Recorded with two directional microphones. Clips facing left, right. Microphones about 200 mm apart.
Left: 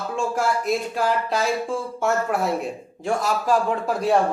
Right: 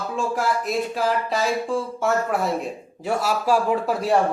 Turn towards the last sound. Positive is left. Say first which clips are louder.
# even
turn(degrees=0)  # may be behind; listen again after turning